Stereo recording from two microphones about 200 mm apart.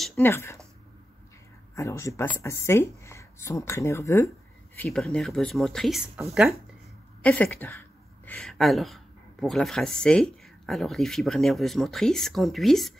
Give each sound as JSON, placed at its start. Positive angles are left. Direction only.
{"t": 0.1, "sound": "speech", "side_deg": 10}
{"t": 1.8, "sound": "speech", "side_deg": 15}